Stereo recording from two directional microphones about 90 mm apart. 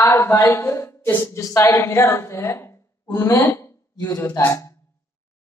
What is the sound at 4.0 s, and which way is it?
Speech, 40° left (ahead or behind).